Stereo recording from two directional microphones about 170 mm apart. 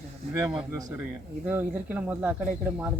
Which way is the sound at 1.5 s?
10° right (ahead or behind).